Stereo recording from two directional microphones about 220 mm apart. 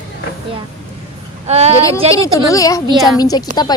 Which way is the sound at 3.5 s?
35° right (ahead or behind).